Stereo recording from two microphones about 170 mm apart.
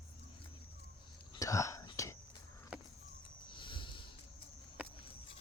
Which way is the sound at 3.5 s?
30° left (ahead or behind).